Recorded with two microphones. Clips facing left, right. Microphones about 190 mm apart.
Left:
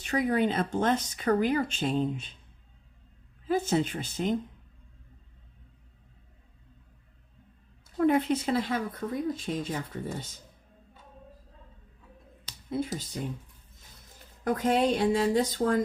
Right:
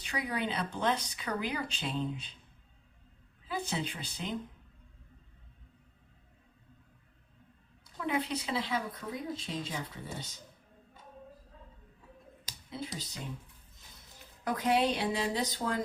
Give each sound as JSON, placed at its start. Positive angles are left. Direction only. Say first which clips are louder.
{"t": 0.0, "sound": "speech", "louder": "left 9 dB", "side_deg": 45}
{"t": 3.4, "sound": "speech", "louder": "left 10 dB", "side_deg": 45}
{"t": 7.9, "sound": "speech", "louder": "left 10 dB", "side_deg": 50}
{"t": 14.4, "sound": "speech", "louder": "left 4 dB", "side_deg": 45}